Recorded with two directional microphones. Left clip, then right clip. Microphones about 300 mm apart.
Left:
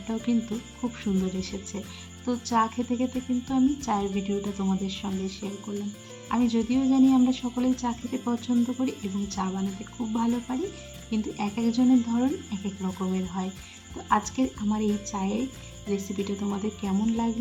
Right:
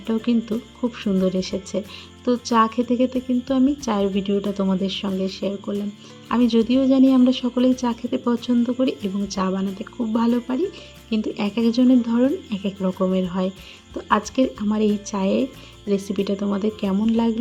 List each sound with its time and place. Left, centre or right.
0.1 s speech: centre